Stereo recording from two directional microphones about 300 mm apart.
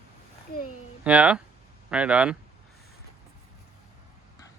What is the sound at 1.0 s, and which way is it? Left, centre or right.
Speech, centre.